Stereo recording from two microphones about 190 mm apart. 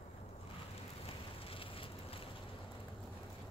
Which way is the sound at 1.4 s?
30° left (ahead or behind).